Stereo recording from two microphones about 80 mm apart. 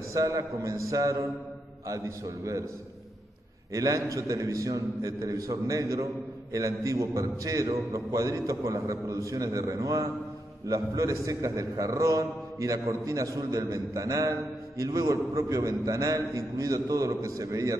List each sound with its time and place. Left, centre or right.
0.1 s a man's voice: right
3.7 s a man's voice: right